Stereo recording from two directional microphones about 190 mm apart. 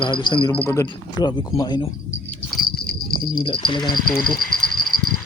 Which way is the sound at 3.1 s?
25° left (ahead or behind).